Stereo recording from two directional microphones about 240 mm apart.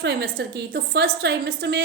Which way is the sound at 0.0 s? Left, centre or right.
Right.